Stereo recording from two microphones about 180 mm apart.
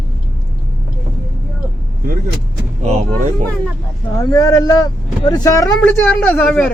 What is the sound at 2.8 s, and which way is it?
Vehicle, 35° right (ahead or behind).